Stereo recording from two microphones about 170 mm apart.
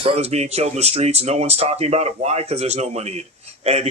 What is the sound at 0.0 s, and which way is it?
Speech, 35° right (ahead or behind).